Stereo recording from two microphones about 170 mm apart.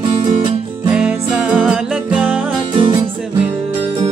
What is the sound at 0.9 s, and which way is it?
Music, 5° right (ahead or behind).